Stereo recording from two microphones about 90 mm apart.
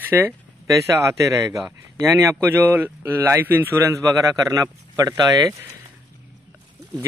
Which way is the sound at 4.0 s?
40° right (ahead or behind).